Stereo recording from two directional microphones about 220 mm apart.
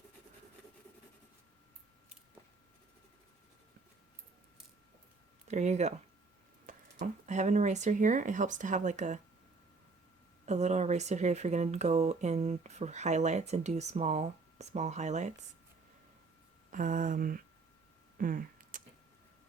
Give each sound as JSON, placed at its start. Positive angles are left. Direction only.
{"t": 5.5, "sound": "speech", "side_deg": -30}
{"t": 10.4, "sound": "speech", "side_deg": -30}
{"t": 16.7, "sound": "speech", "side_deg": -35}
{"t": 18.2, "sound": "a sound", "side_deg": -40}